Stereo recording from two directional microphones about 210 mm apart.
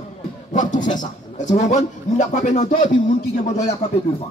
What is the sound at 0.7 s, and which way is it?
A man's voice, 35° left (ahead or behind).